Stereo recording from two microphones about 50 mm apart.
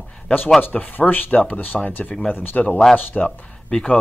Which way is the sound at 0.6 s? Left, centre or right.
Left.